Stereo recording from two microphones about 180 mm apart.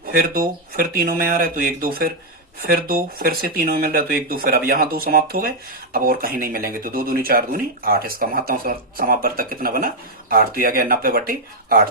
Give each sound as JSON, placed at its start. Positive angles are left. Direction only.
{"t": 0.0, "sound": "speech", "side_deg": -55}